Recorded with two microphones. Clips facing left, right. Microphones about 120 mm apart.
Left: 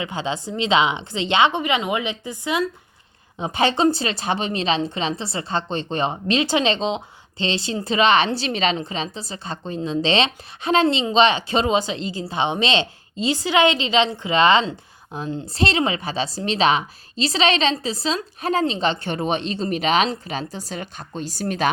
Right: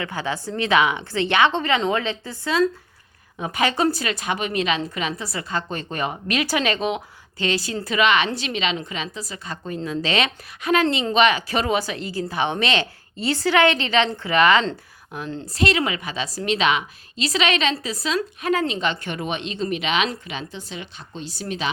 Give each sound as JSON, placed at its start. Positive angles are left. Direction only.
{"t": 0.0, "sound": "a woman's voice", "side_deg": 20}